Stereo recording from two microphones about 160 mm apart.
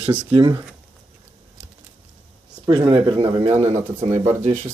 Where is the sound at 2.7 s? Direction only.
25° right (ahead or behind).